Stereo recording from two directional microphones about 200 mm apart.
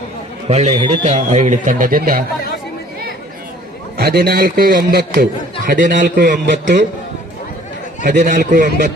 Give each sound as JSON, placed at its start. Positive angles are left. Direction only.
{"t": 0.4, "sound": "a man's voice", "side_deg": -30}
{"t": 3.9, "sound": "a man's voice", "side_deg": -50}
{"t": 8.0, "sound": "speech", "side_deg": -40}